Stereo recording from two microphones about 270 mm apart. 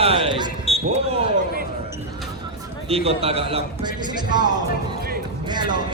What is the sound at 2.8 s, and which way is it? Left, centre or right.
A man's voice, right.